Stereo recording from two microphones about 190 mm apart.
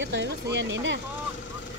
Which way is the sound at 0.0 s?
70° right (ahead or behind).